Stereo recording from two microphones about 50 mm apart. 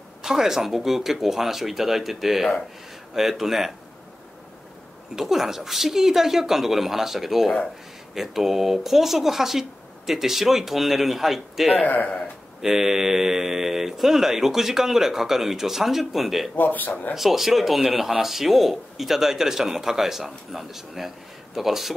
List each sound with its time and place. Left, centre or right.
0.2 s speech: centre
5.1 s speech: centre
11.8 s speech: left
12.6 s speech: centre
16.5 s speech: left
17.1 s speech: centre